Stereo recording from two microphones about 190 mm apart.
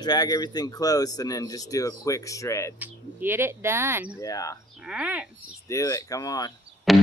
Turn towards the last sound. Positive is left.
turn(degrees=0)  # may be behind; listen again after turning